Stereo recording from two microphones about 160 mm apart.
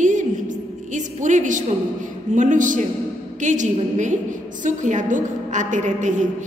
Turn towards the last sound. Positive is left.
turn(degrees=-50)  # may be behind; listen again after turning